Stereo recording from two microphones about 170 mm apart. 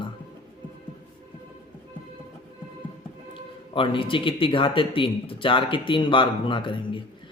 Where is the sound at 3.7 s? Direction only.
30° left (ahead or behind).